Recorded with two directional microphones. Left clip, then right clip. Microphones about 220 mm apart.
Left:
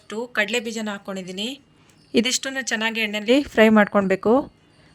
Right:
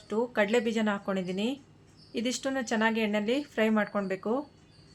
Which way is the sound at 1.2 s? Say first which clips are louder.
Left 3 dB; 50° left (ahead or behind).